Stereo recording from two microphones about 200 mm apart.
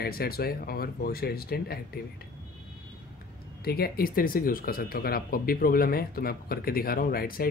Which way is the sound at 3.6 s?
50° left (ahead or behind).